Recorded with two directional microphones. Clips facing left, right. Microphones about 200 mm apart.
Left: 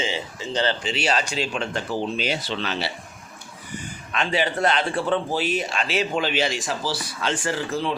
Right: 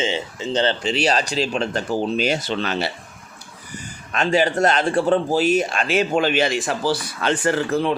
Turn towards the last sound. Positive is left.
turn(degrees=-55)  # may be behind; listen again after turning